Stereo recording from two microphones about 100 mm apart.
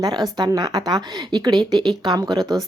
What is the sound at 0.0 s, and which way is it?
A woman's voice, 40° right (ahead or behind).